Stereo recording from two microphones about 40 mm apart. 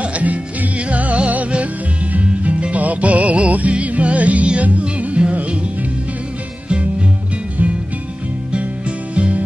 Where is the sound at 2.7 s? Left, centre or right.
Right.